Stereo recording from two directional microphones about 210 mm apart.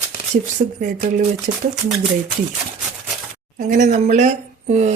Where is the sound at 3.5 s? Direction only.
35° right (ahead or behind).